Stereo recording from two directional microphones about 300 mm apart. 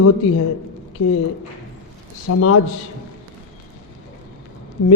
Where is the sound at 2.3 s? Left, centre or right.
Left.